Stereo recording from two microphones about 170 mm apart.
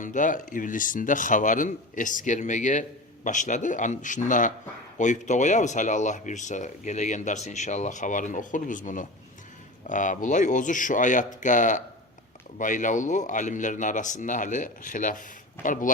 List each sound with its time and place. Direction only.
0.0 s speech: 50° left (ahead or behind)